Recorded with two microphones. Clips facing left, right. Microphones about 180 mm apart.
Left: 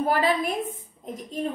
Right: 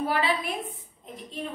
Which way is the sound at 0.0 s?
45° left (ahead or behind).